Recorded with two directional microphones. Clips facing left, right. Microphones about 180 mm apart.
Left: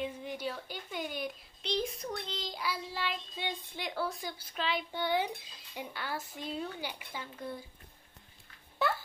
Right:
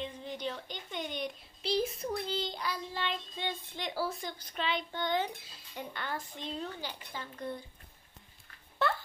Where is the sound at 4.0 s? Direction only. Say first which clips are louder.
Right 1 dB; centre (ahead or behind).